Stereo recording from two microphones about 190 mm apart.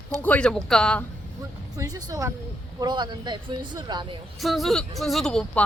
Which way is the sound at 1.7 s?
20° right (ahead or behind).